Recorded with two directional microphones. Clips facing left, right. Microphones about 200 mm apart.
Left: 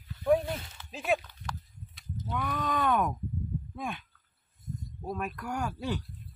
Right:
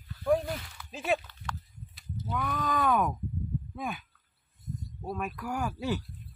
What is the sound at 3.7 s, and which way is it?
Speech, 5° right (ahead or behind).